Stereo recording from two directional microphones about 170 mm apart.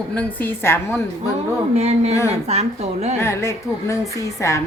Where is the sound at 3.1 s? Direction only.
15° left (ahead or behind).